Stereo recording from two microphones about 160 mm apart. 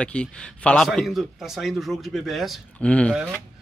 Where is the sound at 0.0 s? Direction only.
5° left (ahead or behind).